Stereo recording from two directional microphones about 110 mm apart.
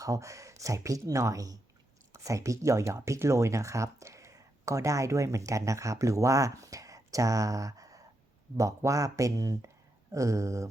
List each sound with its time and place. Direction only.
0.0 s speech: 30° right (ahead or behind)